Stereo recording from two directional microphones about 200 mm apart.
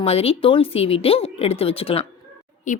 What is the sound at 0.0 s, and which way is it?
Speech, 30° left (ahead or behind).